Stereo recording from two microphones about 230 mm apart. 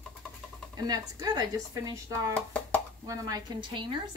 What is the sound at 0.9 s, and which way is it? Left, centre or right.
A woman's voice, centre.